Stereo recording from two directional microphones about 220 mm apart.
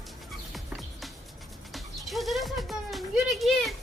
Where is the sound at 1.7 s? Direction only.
Centre (ahead or behind).